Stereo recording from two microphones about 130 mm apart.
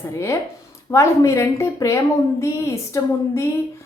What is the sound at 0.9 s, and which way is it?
A woman's voice, 20° left (ahead or behind).